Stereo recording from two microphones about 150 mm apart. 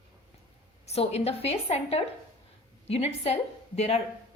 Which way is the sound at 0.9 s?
45° left (ahead or behind).